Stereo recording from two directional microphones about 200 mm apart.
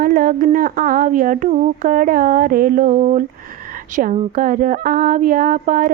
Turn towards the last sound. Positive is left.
turn(degrees=-40)  # may be behind; listen again after turning